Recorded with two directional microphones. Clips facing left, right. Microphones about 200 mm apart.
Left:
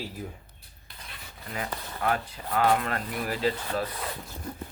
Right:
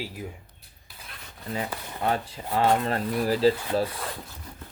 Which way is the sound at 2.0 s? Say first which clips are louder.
Right 2 dB; 25° right (ahead or behind).